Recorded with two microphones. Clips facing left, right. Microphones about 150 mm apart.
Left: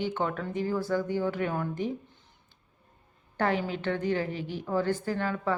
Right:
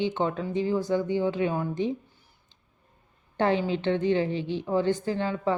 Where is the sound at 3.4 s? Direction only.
25° right (ahead or behind).